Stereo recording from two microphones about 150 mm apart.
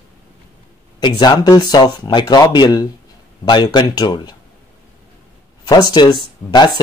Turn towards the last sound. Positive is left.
turn(degrees=30)  # may be behind; listen again after turning